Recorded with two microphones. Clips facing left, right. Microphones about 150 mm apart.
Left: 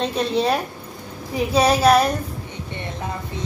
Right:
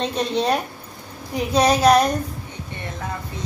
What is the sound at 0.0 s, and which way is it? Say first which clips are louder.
A woman's voice: left 1 dB; 5° left (ahead or behind).